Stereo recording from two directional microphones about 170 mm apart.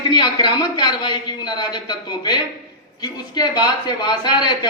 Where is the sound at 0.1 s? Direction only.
25° left (ahead or behind).